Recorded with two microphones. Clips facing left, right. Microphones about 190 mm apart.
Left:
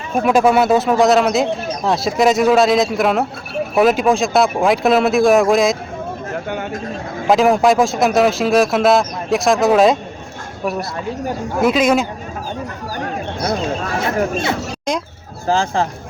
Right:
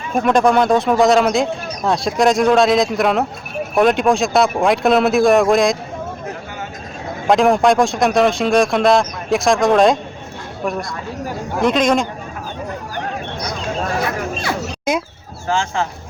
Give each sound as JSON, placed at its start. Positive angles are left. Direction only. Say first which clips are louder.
{"t": 0.1, "sound": "speech", "louder": "left 1 dB", "side_deg": 5}
{"t": 7.3, "sound": "speech", "louder": "even", "side_deg": 0}
{"t": 11.6, "sound": "a man's voice", "louder": "left 1 dB", "side_deg": 5}
{"t": 14.9, "sound": "speech", "louder": "right 2 dB", "side_deg": -5}
{"t": 15.4, "sound": "speech", "louder": "left 3 dB", "side_deg": 35}